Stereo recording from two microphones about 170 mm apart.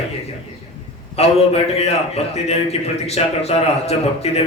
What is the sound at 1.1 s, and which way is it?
A man's voice, 35° left (ahead or behind).